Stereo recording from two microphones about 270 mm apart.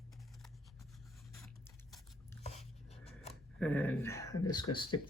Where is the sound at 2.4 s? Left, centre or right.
Left.